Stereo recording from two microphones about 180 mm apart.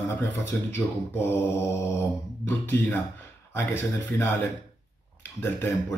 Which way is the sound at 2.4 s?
10° left (ahead or behind).